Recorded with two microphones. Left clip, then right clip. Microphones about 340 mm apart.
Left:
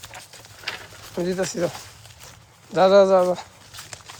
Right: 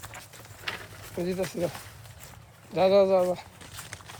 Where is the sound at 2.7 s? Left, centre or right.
Left.